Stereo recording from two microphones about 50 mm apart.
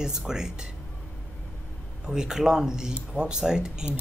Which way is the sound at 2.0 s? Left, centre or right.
Centre.